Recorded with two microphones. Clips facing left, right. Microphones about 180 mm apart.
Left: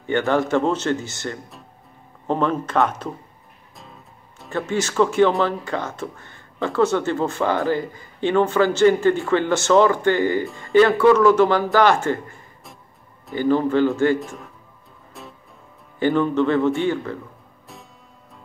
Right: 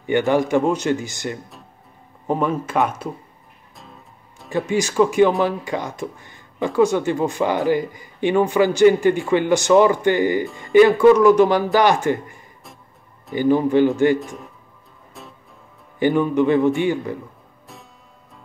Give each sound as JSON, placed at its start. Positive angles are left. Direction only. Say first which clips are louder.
{"t": 0.0, "sound": "speech", "louder": "right 2 dB", "side_deg": -15}
{"t": 3.7, "sound": "music", "louder": "even", "side_deg": 0}
{"t": 4.5, "sound": "speech", "louder": "right 3 dB", "side_deg": -15}
{"t": 14.2, "sound": "speech", "louder": "right 1 dB", "side_deg": 0}
{"t": 15.2, "sound": "music", "louder": "left 1 dB", "side_deg": 0}
{"t": 16.0, "sound": "speech", "louder": "right 1 dB", "side_deg": -15}